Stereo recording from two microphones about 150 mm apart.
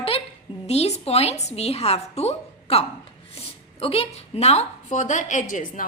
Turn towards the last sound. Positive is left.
turn(degrees=65)  # may be behind; listen again after turning